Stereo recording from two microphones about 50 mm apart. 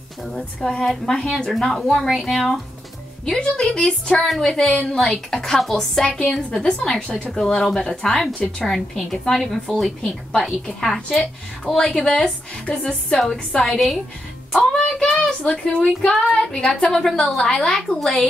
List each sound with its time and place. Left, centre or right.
0.3 s a woman's voice: centre
1.5 s speech: centre
3.3 s a woman's voice: centre
4.2 s a woman's voice: centre
6.0 s a woman's voice: centre
6.3 s a woman's voice: centre
13.7 s speech: centre
14.8 s child singing: centre
16.9 s a woman's voice: centre